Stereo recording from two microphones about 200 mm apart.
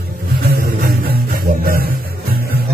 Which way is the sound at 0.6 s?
45° right (ahead or behind).